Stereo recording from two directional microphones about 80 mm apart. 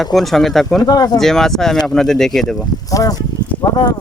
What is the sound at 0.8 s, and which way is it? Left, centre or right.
Speech, left.